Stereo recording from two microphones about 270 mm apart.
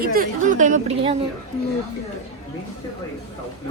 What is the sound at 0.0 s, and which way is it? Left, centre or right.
A woman's voice, right.